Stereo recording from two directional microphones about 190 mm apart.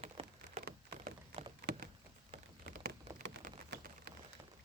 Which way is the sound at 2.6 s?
55° right (ahead or behind).